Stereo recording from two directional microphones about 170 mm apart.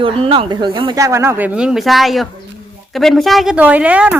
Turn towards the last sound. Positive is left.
turn(degrees=-5)  # may be behind; listen again after turning